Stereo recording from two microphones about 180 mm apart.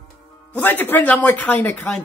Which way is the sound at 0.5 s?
10° left (ahead or behind).